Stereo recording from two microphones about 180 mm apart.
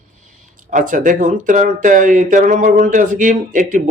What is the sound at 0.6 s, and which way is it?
Speech, 50° right (ahead or behind).